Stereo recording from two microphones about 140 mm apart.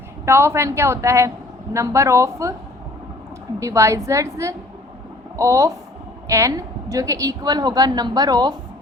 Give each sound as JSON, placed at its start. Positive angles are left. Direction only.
{"t": 0.3, "sound": "a woman's voice", "side_deg": -20}
{"t": 3.6, "sound": "a woman's voice", "side_deg": -20}